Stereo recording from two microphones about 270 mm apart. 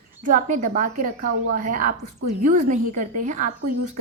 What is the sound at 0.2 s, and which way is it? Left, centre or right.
Speech, right.